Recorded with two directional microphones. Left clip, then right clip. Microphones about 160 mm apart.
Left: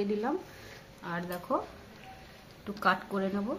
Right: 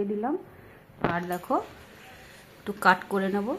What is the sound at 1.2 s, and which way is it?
Speech, 65° right (ahead or behind).